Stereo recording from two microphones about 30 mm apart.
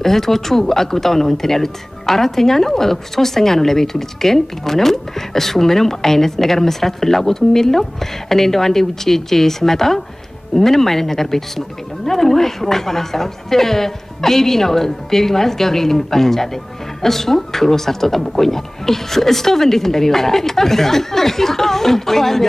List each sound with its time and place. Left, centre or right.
0.0 s speech: centre